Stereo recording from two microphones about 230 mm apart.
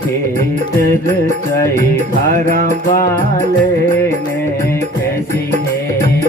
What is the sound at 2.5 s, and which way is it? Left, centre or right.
Music, right.